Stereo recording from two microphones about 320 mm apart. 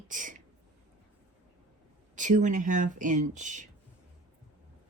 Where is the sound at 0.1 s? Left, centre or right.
Right.